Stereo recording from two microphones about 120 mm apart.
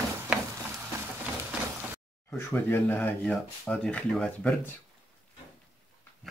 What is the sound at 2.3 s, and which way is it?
Speech, 15° left (ahead or behind).